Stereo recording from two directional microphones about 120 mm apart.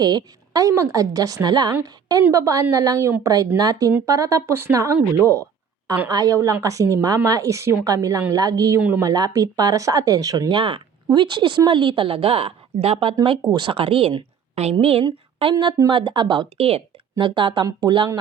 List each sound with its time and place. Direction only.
0.0 s a woman's voice: 35° right (ahead or behind)
14.5 s a woman's voice: 60° right (ahead or behind)
15.5 s speech: 35° right (ahead or behind)